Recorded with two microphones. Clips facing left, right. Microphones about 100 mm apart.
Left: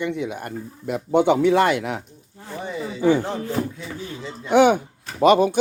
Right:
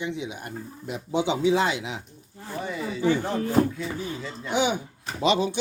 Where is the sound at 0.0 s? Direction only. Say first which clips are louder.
Left 6 dB; 55° left (ahead or behind).